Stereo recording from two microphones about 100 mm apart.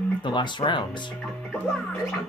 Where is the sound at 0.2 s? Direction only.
50° left (ahead or behind).